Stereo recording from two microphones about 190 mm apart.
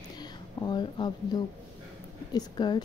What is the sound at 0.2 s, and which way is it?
A woman's voice, 20° left (ahead or behind).